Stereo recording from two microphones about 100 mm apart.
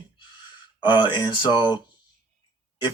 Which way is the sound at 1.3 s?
50° left (ahead or behind).